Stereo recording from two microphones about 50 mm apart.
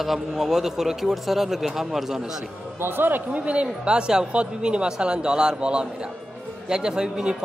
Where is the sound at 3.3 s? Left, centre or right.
Right.